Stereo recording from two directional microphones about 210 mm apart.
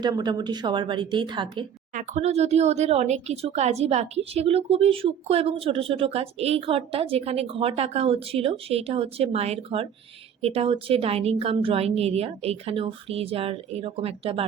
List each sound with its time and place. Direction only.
0.0 s speech: 20° right (ahead or behind)
1.9 s speech: 35° right (ahead or behind)